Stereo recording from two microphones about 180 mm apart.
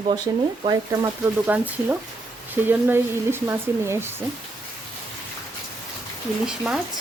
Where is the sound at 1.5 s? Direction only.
10° right (ahead or behind).